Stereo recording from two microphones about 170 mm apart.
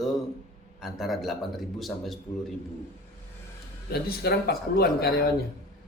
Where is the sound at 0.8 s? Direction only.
Centre (ahead or behind).